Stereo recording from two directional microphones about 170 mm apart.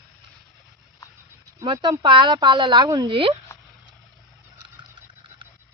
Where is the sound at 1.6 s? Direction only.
25° right (ahead or behind).